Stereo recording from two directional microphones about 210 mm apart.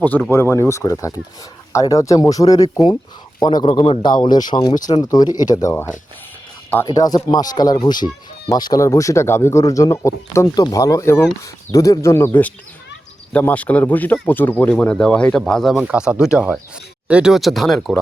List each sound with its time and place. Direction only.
0.0 s a man's voice: 10° left (ahead or behind)